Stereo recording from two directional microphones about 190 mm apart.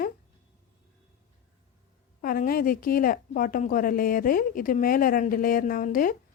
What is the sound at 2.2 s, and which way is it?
A woman's voice, 50° left (ahead or behind).